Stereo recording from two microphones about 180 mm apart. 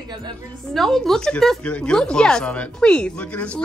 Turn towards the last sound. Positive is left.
turn(degrees=5)  # may be behind; listen again after turning